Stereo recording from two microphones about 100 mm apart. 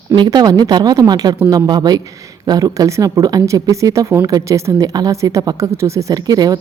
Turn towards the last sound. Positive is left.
turn(degrees=-40)  # may be behind; listen again after turning